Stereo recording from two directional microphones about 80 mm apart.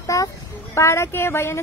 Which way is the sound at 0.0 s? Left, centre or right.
Left.